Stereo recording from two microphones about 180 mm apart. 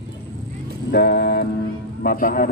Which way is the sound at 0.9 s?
60° left (ahead or behind).